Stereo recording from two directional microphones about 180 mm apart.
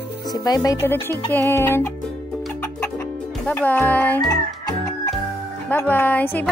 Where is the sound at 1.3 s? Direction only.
15° left (ahead or behind).